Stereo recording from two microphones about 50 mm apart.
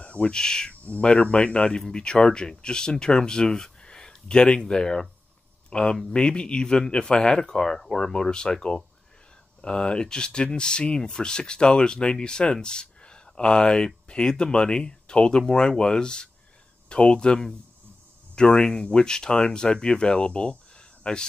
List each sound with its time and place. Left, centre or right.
0.0 s speech: left